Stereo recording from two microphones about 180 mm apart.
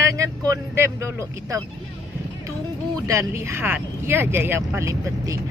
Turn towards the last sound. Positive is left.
turn(degrees=-15)  # may be behind; listen again after turning